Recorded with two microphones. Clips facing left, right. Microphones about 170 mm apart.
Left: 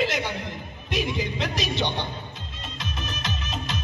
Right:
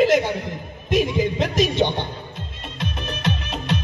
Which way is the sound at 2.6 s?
60° right (ahead or behind).